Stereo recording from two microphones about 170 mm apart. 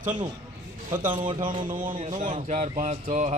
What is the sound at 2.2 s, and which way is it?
A man's voice, 50° right (ahead or behind).